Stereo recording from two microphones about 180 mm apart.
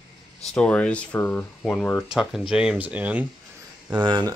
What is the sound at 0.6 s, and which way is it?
Speech, 5° left (ahead or behind).